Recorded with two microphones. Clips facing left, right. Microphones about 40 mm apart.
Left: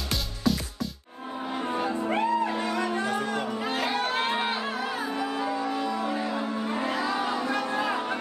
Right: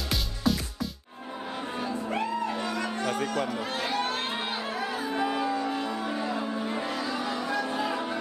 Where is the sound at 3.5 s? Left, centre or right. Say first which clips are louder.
Left 2 dB; left.